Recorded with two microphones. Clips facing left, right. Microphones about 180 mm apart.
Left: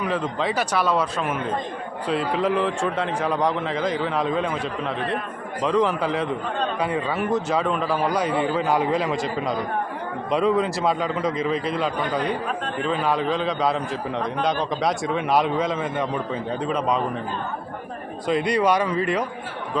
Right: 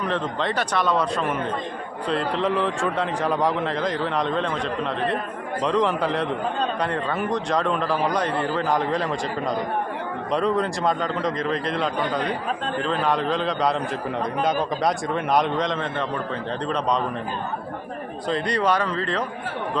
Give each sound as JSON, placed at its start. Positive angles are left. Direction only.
{"t": 0.0, "sound": "a man's voice", "side_deg": 5}
{"t": 18.3, "sound": "speech", "side_deg": 10}